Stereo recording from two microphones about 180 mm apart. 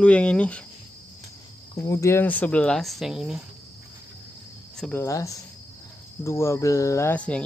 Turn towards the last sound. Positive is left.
turn(degrees=5)  # may be behind; listen again after turning